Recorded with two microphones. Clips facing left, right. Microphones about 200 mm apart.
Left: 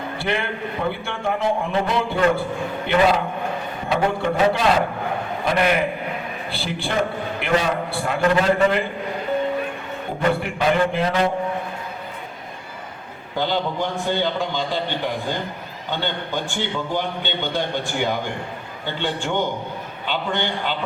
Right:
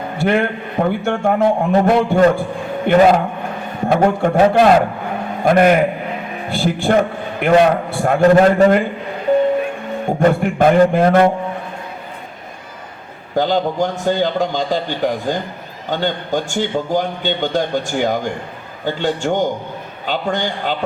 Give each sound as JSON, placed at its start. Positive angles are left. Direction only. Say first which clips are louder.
{"t": 0.2, "sound": "a man's voice", "louder": "right 9 dB", "side_deg": -45}
{"t": 10.2, "sound": "a man's voice", "louder": "right 7 dB", "side_deg": -45}
{"t": 13.3, "sound": "a man's voice", "louder": "right 6 dB", "side_deg": -45}